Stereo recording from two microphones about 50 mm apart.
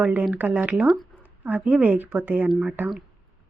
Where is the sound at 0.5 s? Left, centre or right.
Right.